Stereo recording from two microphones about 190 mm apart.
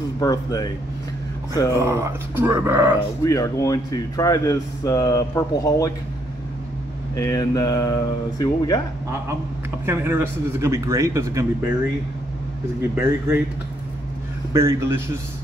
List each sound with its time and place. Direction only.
0.2 s speech: 20° left (ahead or behind)
1.8 s a man's voice: 15° right (ahead or behind)
3.3 s speech: 15° left (ahead or behind)
7.2 s speech: 20° left (ahead or behind)
9.8 s a man's voice: 10° right (ahead or behind)
14.5 s a man's voice: 15° right (ahead or behind)